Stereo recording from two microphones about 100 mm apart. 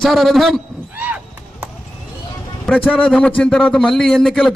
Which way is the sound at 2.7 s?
10° left (ahead or behind).